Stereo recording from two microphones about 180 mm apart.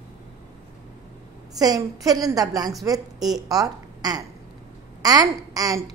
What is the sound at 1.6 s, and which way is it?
A woman's voice, 20° right (ahead or behind).